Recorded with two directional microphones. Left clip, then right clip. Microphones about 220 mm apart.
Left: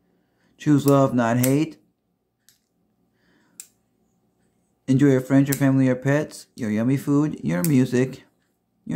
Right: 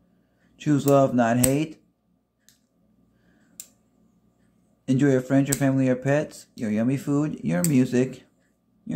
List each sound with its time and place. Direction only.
0.6 s speech: 10° left (ahead or behind)
4.8 s speech: 10° left (ahead or behind)
8.9 s a sound: 15° left (ahead or behind)